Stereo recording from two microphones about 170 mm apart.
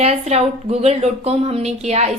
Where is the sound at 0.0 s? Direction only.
40° right (ahead or behind).